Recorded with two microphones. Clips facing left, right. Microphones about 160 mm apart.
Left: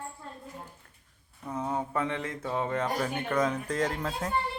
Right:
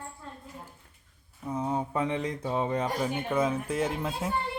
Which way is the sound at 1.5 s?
10° right (ahead or behind).